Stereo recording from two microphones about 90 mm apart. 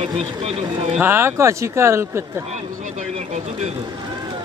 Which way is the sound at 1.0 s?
25° right (ahead or behind).